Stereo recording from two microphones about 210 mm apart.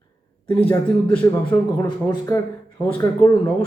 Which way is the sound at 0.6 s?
5° left (ahead or behind).